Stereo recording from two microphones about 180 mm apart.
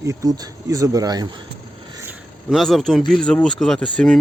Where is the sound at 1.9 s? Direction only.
15° right (ahead or behind).